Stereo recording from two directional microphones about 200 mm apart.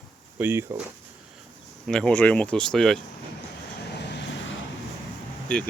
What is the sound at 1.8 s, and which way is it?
Speech, 5° left (ahead or behind).